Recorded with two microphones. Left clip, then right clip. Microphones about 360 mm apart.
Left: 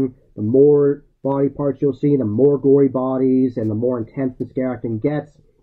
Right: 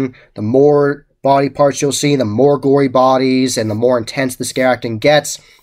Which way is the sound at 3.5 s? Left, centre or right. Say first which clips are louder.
Right 7 dB; centre.